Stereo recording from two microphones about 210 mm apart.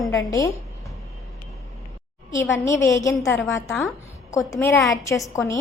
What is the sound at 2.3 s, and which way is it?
A woman's voice, 15° left (ahead or behind).